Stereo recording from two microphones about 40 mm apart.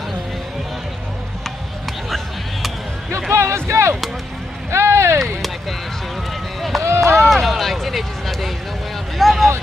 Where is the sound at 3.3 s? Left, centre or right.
Right.